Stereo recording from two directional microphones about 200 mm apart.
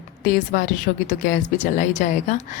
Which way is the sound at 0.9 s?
50° left (ahead or behind).